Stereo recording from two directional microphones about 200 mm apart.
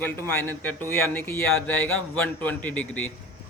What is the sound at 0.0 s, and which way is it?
A man's voice, 10° left (ahead or behind).